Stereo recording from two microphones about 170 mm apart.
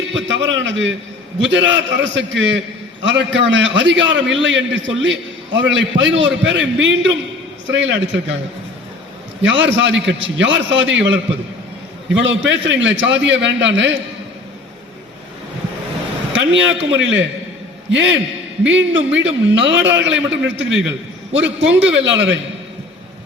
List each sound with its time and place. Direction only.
0.2 s a man's voice: 90° right
9.4 s a man's voice: 90° right
16.3 s a man's voice: 90° right